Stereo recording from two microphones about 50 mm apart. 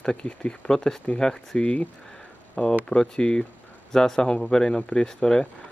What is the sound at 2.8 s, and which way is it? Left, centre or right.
Speech, centre.